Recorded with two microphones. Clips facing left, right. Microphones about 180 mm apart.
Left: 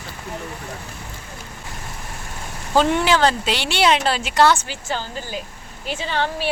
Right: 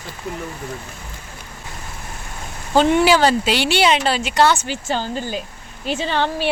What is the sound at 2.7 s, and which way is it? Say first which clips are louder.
Speech: right 3 dB; 5° right (ahead or behind).